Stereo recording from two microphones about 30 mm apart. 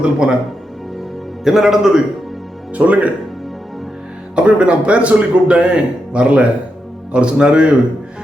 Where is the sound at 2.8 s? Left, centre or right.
Right.